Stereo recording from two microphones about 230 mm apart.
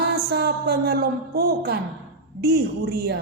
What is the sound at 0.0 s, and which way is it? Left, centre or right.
A woman's voice, right.